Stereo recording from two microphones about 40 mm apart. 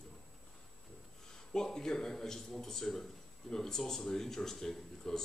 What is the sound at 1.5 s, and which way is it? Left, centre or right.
Speech, centre.